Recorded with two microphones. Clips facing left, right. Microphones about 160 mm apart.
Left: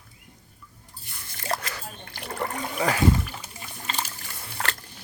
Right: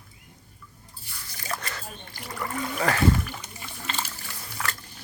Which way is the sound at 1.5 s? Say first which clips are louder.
Left 4 dB; 35° left (ahead or behind).